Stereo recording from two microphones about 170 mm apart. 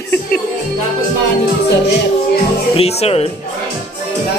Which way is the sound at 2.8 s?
35° left (ahead or behind).